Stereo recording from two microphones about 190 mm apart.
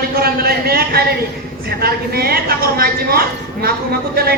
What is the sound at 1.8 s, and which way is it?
A woman's voice, 55° right (ahead or behind).